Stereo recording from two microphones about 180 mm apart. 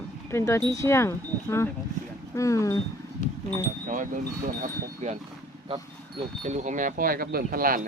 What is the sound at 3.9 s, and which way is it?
Speech, 50° right (ahead or behind).